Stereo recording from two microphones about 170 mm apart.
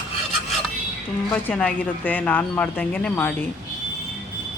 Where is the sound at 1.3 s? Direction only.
10° left (ahead or behind).